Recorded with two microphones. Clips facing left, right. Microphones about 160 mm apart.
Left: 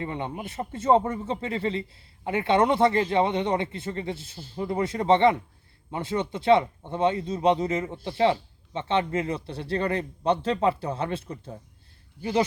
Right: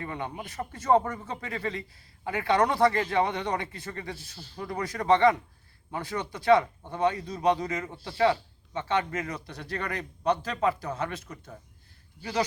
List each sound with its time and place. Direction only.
0.0 s speech: 25° left (ahead or behind)